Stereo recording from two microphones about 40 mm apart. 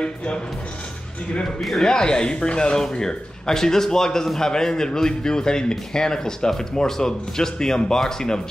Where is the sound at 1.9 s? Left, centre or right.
Centre.